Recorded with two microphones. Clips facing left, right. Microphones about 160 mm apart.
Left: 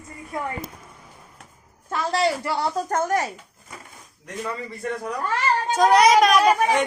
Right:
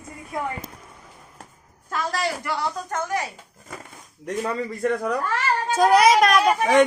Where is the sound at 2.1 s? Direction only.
25° left (ahead or behind); by 3.3 s 45° left (ahead or behind).